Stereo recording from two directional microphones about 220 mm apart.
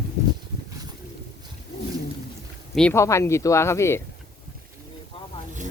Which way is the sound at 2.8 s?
10° left (ahead or behind).